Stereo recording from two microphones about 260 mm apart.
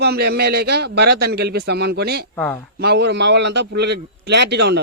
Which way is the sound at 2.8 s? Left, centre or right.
Right.